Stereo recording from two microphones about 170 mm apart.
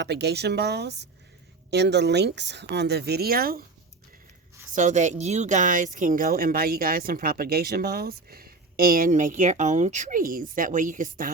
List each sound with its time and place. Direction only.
0.0 s speech: 80° right
1.7 s speech: 90° right; by 3.6 s 60° right (ahead or behind)
4.7 s speech: 45° right (ahead or behind)